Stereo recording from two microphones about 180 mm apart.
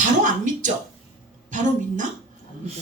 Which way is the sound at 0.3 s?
45° right (ahead or behind).